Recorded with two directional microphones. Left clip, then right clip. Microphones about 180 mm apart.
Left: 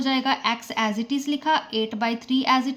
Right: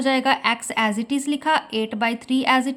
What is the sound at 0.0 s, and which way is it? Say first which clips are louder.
A woman's voice: right 4 dB; 30° right (ahead or behind).